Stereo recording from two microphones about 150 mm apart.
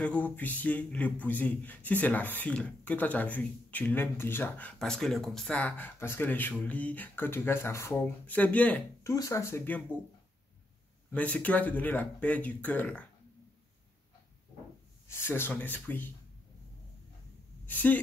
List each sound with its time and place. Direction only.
0.0 s a man's voice: 10° left (ahead or behind)
9.1 s speech: 20° left (ahead or behind)
11.1 s a man's voice: 10° left (ahead or behind)
15.0 s a man's voice: 15° left (ahead or behind)
17.6 s a man's voice: 10° left (ahead or behind)